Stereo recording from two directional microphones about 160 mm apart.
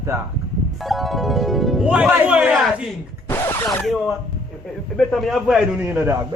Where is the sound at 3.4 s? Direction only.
25° left (ahead or behind).